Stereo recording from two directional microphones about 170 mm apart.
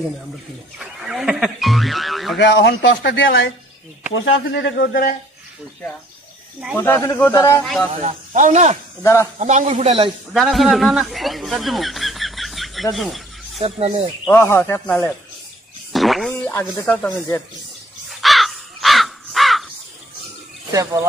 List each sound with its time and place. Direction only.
0.7 s speech: centre (ahead or behind)
2.3 s speech: 90° left; by 5.1 s 65° left (ahead or behind)
6.8 s speech: 15° left (ahead or behind)
8.0 s speech: 45° right (ahead or behind)
9.0 s speech: 15° left (ahead or behind)
9.4 s a man's voice: 45° right (ahead or behind)
10.3 s speech: centre (ahead or behind)
12.9 s a sound: centre (ahead or behind)
13.6 s a man's voice: 35° right (ahead or behind)
14.3 s speech: 15° left (ahead or behind)
15.9 s speech: centre (ahead or behind)
18.2 s crow: centre (ahead or behind)